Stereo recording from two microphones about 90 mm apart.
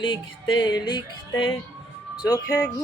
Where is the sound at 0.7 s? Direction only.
50° left (ahead or behind).